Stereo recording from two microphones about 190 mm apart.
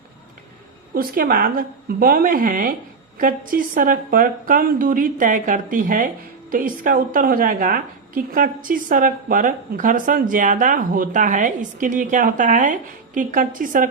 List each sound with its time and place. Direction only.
0.9 s a woman's voice: 50° right (ahead or behind)